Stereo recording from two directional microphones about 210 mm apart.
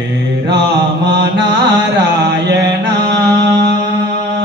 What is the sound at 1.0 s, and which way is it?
Mantra, 55° right (ahead or behind).